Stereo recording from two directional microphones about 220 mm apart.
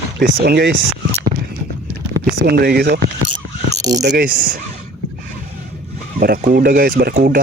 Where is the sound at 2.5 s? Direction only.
45° right (ahead or behind).